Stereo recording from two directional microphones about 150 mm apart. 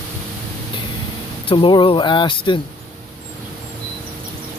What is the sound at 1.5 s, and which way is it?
Speech, 35° left (ahead or behind).